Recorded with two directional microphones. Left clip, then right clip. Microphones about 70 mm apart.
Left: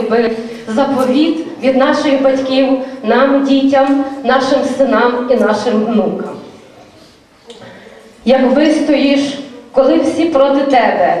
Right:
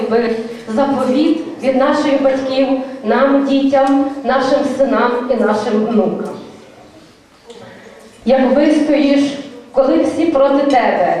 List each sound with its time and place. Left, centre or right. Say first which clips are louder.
0.1 s a woman's voice: left 2 dB; left
8.5 s a woman's voice: left 1 dB; left